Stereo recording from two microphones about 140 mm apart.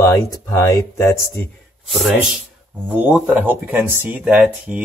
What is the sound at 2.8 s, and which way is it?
A man's voice, 10° right (ahead or behind).